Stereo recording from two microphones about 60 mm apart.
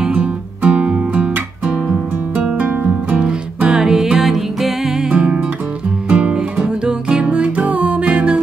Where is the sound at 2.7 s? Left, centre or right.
Right.